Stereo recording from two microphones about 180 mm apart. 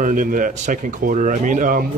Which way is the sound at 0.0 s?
50° right (ahead or behind).